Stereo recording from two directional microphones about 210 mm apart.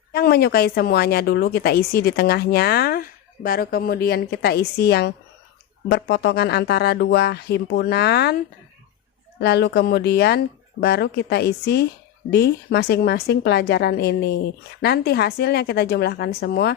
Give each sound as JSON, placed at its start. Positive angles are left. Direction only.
{"t": 0.1, "sound": "a woman's voice", "side_deg": 50}
{"t": 9.4, "sound": "a woman's voice", "side_deg": 55}